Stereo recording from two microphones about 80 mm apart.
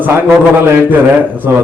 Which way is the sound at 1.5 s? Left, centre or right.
Right.